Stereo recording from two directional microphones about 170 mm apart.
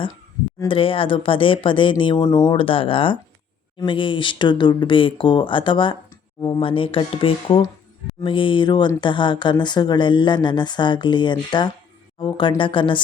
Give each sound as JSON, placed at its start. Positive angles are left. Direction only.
{"t": 0.7, "sound": "speech", "side_deg": 30}